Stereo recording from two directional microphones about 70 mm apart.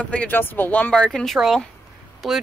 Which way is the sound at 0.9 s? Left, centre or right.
Centre.